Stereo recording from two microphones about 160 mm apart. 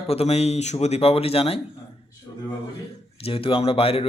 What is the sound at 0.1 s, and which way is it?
Speech, 40° left (ahead or behind).